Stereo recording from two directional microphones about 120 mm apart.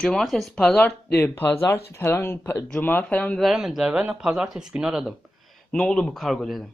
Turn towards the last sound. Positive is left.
turn(degrees=0)  # may be behind; listen again after turning